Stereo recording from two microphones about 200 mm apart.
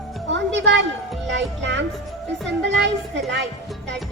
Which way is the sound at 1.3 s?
65° right (ahead or behind).